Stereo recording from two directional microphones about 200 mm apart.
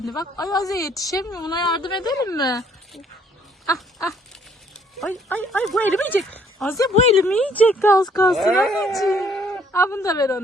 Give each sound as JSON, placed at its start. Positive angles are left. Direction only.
{"t": 0.1, "sound": "a woman's voice", "side_deg": 20}
{"t": 4.1, "sound": "speech", "side_deg": 0}
{"t": 6.9, "sound": "speech", "side_deg": 35}
{"t": 7.3, "sound": "speech", "side_deg": 5}
{"t": 8.3, "sound": "speech", "side_deg": 0}
{"t": 9.7, "sound": "speech", "side_deg": 15}